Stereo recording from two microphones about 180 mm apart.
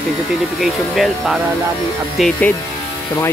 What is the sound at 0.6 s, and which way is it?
Speech, centre (ahead or behind).